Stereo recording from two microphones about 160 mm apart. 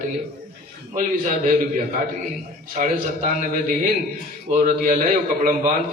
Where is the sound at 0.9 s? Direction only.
55° right (ahead or behind).